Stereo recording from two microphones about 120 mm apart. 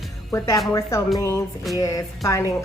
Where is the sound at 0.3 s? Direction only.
25° left (ahead or behind).